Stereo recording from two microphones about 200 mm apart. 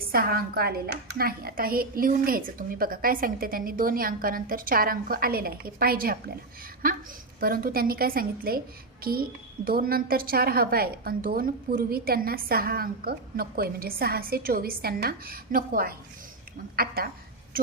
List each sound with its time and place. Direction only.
0.1 s a woman's voice: 50° right (ahead or behind)
9.6 s a woman's voice: 45° right (ahead or behind)